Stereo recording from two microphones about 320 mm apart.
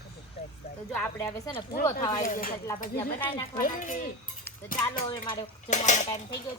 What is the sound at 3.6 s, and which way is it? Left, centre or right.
Speech, left.